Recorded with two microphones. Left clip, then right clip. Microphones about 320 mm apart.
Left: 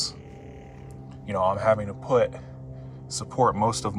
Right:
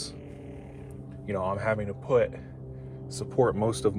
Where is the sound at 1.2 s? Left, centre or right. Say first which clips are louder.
Left 6 dB; left.